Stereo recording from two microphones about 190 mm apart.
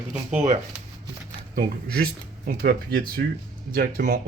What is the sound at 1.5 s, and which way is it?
Speech, 50° right (ahead or behind).